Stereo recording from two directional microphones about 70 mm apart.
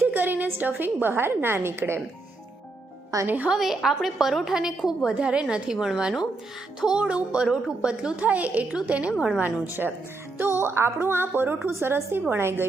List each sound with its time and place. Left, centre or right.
0.1 s a woman's voice: right
3.2 s a woman's voice: right
3.5 s a woman's voice: centre
9.4 s a woman's voice: right